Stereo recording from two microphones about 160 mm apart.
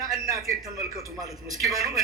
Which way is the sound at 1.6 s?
20° right (ahead or behind).